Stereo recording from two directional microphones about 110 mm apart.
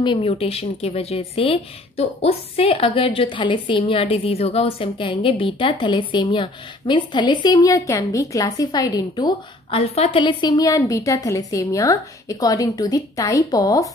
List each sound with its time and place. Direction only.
0.0 s a woman's voice: 50° left (ahead or behind)
7.6 s a woman's voice: 30° left (ahead or behind)
9.7 s speech: 60° left (ahead or behind)
10.5 s a woman's voice: 35° left (ahead or behind)